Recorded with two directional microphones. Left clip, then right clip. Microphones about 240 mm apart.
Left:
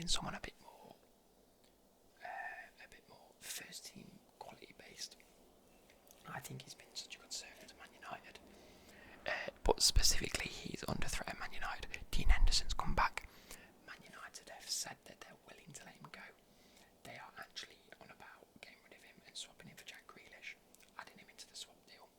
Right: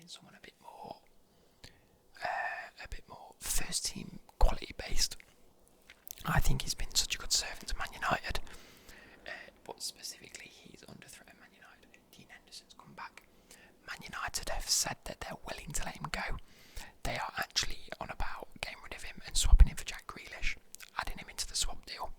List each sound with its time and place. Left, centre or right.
0.0 s speech: left
2.1 s whispering: right
9.2 s whispering: centre
13.8 s whispering: centre
14.1 s whispering: right